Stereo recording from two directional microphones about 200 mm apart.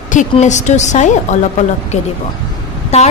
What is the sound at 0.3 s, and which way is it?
A woman's voice, 35° left (ahead or behind).